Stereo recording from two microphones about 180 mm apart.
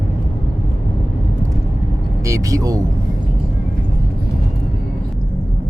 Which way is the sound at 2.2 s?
20° right (ahead or behind).